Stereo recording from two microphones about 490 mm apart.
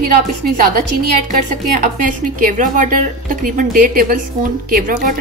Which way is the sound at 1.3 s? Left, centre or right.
Centre.